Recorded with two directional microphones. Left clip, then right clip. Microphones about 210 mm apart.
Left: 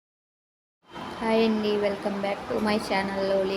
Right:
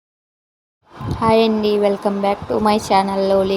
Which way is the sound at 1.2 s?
35° right (ahead or behind).